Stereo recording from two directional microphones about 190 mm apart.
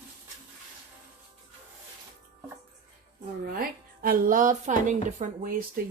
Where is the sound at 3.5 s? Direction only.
50° right (ahead or behind).